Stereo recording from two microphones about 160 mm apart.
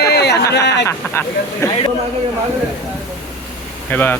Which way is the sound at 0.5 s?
90° left.